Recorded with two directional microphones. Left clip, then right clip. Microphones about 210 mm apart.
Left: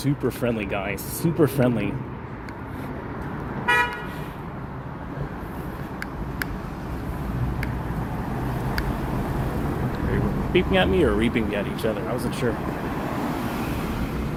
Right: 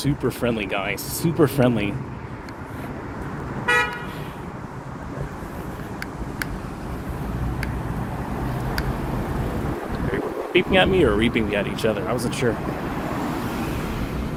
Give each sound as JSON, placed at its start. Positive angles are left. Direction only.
{"t": 0.0, "sound": "speech", "side_deg": -5}
{"t": 3.7, "sound": "toot", "side_deg": -15}
{"t": 10.5, "sound": "speech", "side_deg": -20}